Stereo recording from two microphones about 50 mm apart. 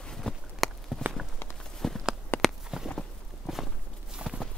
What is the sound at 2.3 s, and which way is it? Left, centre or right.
Walk, left.